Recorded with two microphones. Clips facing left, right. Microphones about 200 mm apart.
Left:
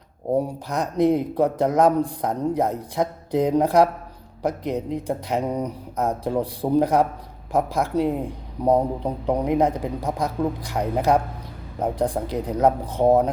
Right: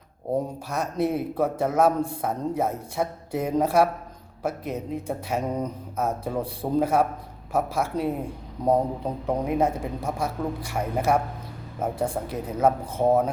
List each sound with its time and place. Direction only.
0.3 s a man's voice: 15° left (ahead or behind)